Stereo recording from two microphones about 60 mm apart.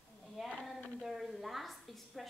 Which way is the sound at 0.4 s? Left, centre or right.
Centre.